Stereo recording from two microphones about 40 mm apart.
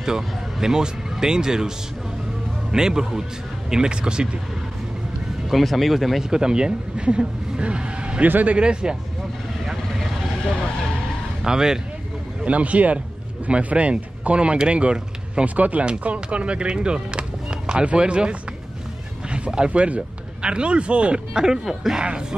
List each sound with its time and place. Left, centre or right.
0.0 s speech: centre
2.7 s a man's voice: centre
5.5 s speech: centre
6.3 s speech: centre
8.3 s speech: right
8.5 s speech: right
11.4 s a man's voice: centre
12.4 s speech: right
19.3 s speech: right